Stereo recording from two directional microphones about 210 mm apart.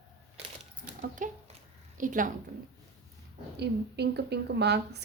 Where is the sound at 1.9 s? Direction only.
40° right (ahead or behind).